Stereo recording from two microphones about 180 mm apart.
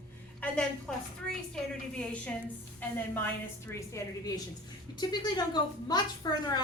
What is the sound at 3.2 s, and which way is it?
A woman's voice, 15° left (ahead or behind).